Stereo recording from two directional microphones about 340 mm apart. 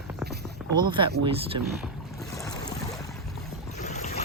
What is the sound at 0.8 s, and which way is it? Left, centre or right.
Speech, centre.